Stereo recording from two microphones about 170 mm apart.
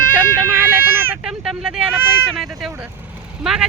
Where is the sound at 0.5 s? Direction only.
10° right (ahead or behind).